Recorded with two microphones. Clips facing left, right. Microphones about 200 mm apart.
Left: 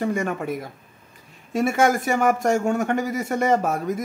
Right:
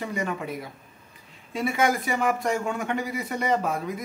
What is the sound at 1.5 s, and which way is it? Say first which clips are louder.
A woman's voice: left 5 dB; 45° left (ahead or behind).